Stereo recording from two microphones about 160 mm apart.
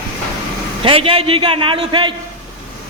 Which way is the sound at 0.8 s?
35° right (ahead or behind).